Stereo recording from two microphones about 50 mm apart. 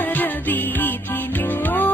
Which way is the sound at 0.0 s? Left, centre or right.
Left.